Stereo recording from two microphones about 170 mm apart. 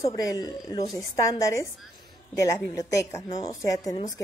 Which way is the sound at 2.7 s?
20° left (ahead or behind).